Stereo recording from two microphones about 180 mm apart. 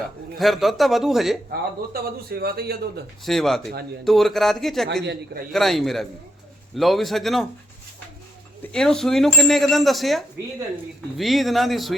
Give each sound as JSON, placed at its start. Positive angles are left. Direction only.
{"t": 0.3, "sound": "speech", "side_deg": 0}
{"t": 1.9, "sound": "a man's voice", "side_deg": -60}
{"t": 3.2, "sound": "speech", "side_deg": 0}
{"t": 8.7, "sound": "speech", "side_deg": 5}